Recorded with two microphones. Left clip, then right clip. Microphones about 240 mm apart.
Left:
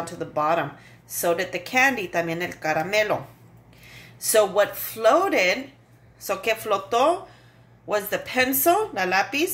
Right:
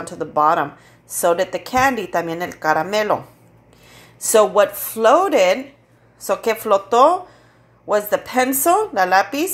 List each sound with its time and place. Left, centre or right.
0.0 s a woman's voice: centre